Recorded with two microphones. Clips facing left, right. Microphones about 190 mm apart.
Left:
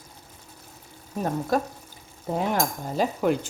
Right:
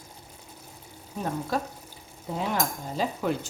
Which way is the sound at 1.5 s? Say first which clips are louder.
Left 5 dB; 45° left (ahead or behind).